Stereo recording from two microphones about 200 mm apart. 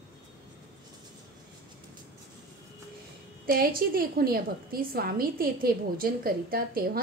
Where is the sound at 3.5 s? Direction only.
50° right (ahead or behind).